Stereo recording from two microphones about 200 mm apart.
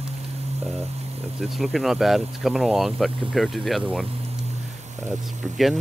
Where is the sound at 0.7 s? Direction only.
30° right (ahead or behind).